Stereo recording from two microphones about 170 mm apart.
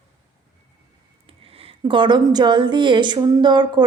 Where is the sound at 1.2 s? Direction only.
35° right (ahead or behind).